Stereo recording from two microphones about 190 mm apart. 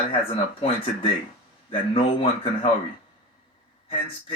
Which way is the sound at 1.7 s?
30° left (ahead or behind).